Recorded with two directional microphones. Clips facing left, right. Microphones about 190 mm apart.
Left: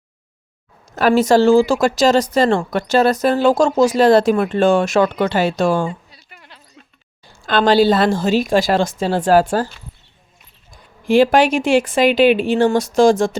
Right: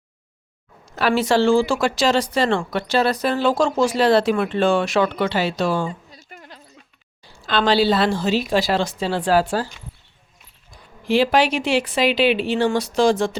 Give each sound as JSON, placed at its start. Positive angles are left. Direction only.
{"t": 0.9, "sound": "speech", "side_deg": 45}
{"t": 6.1, "sound": "a sound", "side_deg": -45}
{"t": 7.3, "sound": "speech", "side_deg": 50}
{"t": 11.0, "sound": "speech", "side_deg": 50}